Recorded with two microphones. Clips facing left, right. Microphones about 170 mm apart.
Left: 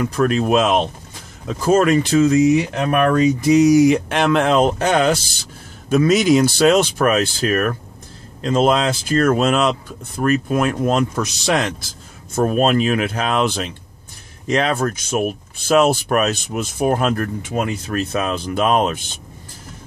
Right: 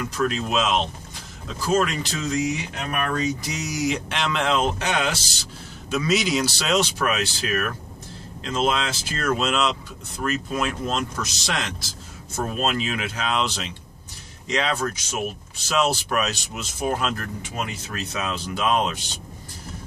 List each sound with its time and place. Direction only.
0.0 s speech: 55° left (ahead or behind)